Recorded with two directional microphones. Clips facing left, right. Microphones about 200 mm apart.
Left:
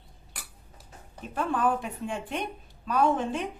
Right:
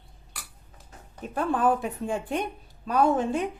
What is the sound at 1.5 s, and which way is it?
A woman's voice, 40° right (ahead or behind).